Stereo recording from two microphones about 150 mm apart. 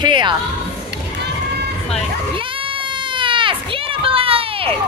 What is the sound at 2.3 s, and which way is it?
Goat, 35° right (ahead or behind).